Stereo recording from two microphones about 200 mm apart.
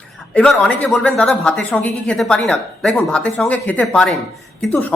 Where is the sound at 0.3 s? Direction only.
5° left (ahead or behind).